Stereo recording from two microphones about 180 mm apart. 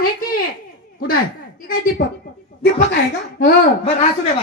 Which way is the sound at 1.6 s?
50° left (ahead or behind).